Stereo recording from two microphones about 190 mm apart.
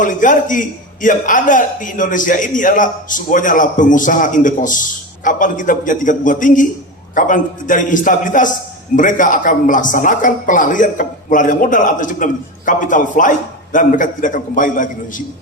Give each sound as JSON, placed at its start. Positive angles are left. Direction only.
{"t": 0.0, "sound": "a man's voice", "side_deg": 45}